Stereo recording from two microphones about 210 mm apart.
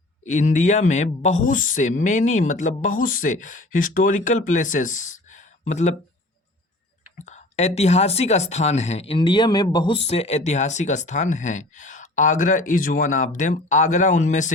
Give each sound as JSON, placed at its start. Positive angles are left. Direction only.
{"t": 0.3, "sound": "a woman's voice", "side_deg": 35}
{"t": 5.3, "sound": "a sound", "side_deg": 35}
{"t": 7.2, "sound": "a woman's voice", "side_deg": 35}